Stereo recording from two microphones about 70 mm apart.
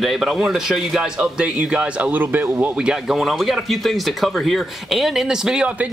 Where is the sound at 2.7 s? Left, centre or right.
Centre.